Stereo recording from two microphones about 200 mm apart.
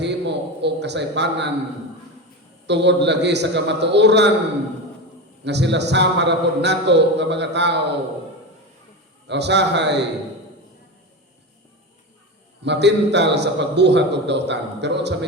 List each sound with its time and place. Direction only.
0.0 s a sound: 60° right (ahead or behind)
2.6 s a man's voice: 60° right (ahead or behind)
5.5 s a man's voice: 60° right (ahead or behind)
9.2 s a man's voice: 60° right (ahead or behind)
12.6 s a man's voice: 60° right (ahead or behind)